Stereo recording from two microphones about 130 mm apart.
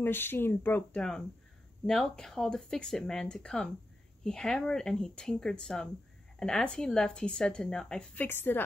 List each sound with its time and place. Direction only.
0.0 s speech: 15° left (ahead or behind)
1.9 s speech: centre (ahead or behind)